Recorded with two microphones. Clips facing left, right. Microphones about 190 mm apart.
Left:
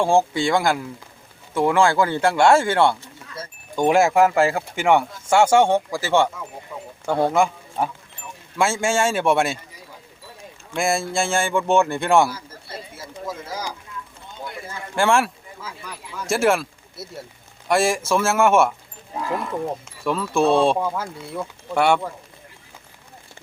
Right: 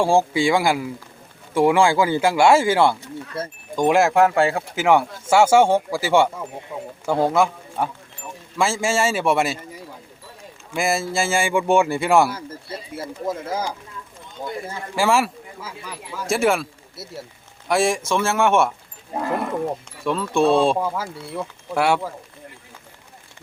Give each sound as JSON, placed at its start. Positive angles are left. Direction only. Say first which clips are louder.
{"t": 0.0, "sound": "speech", "louder": "right 1 dB", "side_deg": -10}
{"t": 10.8, "sound": "speech", "louder": "even", "side_deg": -5}
{"t": 13.0, "sound": "speech", "louder": "right 7 dB", "side_deg": -55}
{"t": 14.9, "sound": "speech", "louder": "even", "side_deg": -5}